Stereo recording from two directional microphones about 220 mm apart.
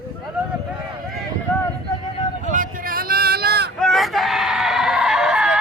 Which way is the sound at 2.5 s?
40° right (ahead or behind).